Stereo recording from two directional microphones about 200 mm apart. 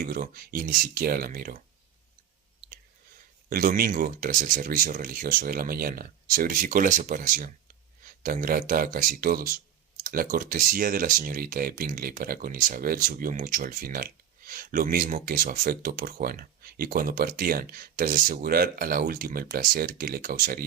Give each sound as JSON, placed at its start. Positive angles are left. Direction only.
{"t": 0.0, "sound": "speech", "side_deg": -45}
{"t": 3.5, "sound": "speech", "side_deg": -45}